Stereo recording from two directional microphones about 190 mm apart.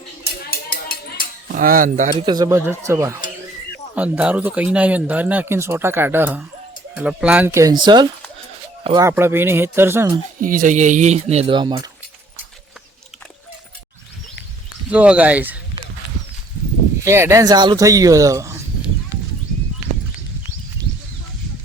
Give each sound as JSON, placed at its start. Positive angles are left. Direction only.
{"t": 0.5, "sound": "a sound", "side_deg": 50}
{"t": 1.5, "sound": "speech", "side_deg": -45}
{"t": 2.1, "sound": "speech", "side_deg": -25}
{"t": 9.0, "sound": "speech", "side_deg": -10}
{"t": 10.4, "sound": "speech", "side_deg": -45}
{"t": 14.8, "sound": "speech", "side_deg": -5}
{"t": 17.0, "sound": "speech", "side_deg": -15}